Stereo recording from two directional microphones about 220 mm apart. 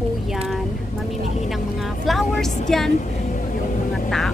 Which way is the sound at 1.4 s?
Centre (ahead or behind).